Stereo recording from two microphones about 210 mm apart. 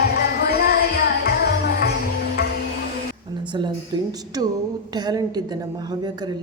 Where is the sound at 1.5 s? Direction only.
50° left (ahead or behind).